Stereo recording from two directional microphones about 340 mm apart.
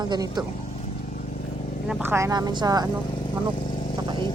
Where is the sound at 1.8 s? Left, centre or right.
Centre.